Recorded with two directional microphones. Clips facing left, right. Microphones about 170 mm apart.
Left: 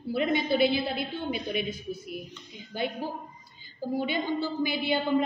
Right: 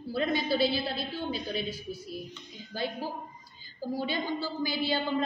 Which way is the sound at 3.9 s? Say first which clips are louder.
Left 4 dB; 20° left (ahead or behind).